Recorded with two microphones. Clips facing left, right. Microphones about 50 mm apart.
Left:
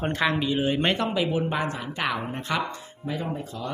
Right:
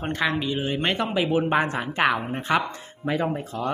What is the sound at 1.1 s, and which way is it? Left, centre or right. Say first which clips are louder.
Speech: right 3 dB; right.